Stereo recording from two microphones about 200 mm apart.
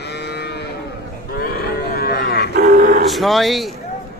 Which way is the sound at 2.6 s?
40° right (ahead or behind).